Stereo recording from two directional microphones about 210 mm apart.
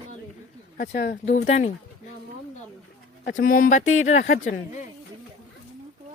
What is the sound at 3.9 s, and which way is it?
Speech, 70° left (ahead or behind).